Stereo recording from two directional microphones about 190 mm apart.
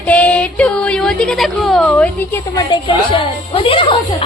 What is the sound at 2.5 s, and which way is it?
A woman's voice, 25° left (ahead or behind).